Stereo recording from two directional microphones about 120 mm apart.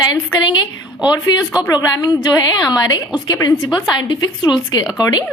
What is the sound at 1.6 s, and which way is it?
A woman's voice, 30° left (ahead or behind).